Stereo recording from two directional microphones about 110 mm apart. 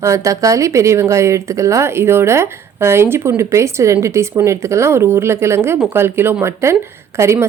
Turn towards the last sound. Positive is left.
turn(degrees=-25)  # may be behind; listen again after turning